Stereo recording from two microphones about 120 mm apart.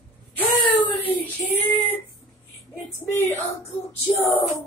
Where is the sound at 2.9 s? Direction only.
20° left (ahead or behind).